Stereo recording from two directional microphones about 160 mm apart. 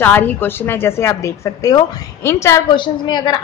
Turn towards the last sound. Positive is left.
turn(degrees=25)  # may be behind; listen again after turning